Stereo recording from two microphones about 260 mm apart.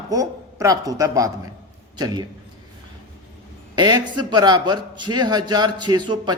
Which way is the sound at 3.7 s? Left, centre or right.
Centre.